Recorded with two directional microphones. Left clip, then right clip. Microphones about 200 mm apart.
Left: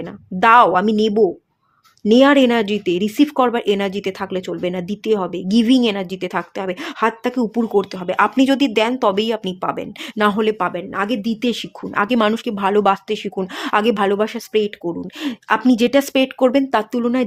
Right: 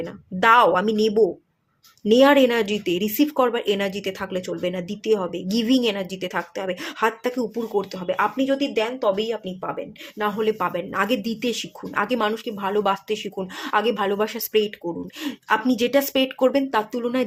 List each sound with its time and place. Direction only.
0.0 s speech: 25° left (ahead or behind)
8.4 s speech: 55° left (ahead or behind); by 10.7 s 35° left (ahead or behind)
10.7 s speech: 20° left (ahead or behind)